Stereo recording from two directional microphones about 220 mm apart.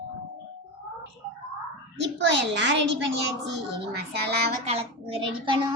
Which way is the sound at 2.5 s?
55° right (ahead or behind).